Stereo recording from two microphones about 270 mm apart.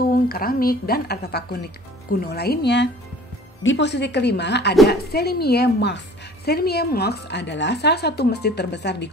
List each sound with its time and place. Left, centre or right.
0.1 s a woman's voice: left